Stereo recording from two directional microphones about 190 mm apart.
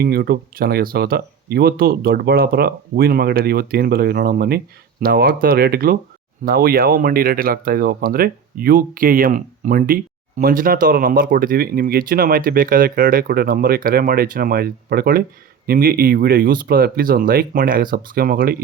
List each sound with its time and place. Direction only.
0.0 s speech: 55° right (ahead or behind)